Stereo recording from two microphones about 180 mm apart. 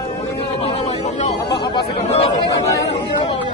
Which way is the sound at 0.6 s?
35° left (ahead or behind).